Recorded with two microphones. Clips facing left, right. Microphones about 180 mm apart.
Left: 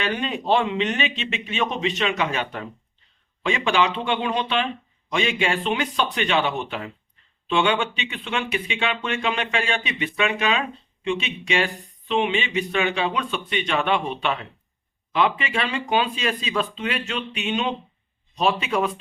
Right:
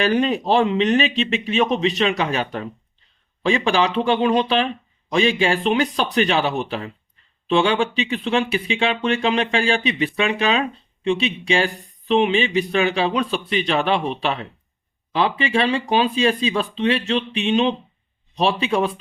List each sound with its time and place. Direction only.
0.0 s speech: 35° right (ahead or behind)